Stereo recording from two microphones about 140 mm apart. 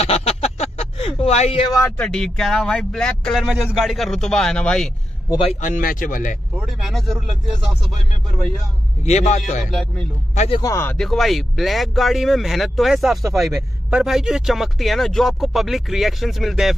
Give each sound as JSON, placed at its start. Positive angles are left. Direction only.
{"t": 0.0, "sound": "a sound", "side_deg": 50}
{"t": 1.9, "sound": "speech", "side_deg": 5}
{"t": 5.6, "sound": "speech", "side_deg": 80}
{"t": 6.5, "sound": "speech", "side_deg": -5}
{"t": 9.0, "sound": "a man's voice", "side_deg": 55}
{"t": 9.7, "sound": "speech", "side_deg": 0}
{"t": 10.3, "sound": "speech", "side_deg": 55}
{"t": 10.6, "sound": "speech", "side_deg": 20}
{"t": 11.0, "sound": "speech", "side_deg": 0}